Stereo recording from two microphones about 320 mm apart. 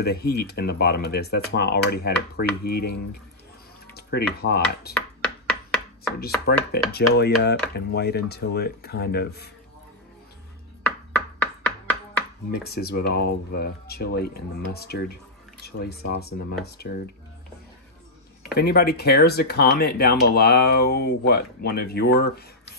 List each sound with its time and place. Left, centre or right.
0.0 s speech: left
4.9 s chopping: centre
6.4 s speech: left
11.1 s chopping: centre
12.4 s speech: left
18.5 s speech: left